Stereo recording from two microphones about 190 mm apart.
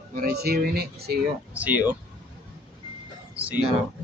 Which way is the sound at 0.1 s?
50° right (ahead or behind).